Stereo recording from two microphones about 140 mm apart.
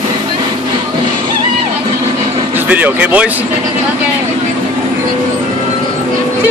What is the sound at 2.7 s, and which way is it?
Speech, 10° right (ahead or behind).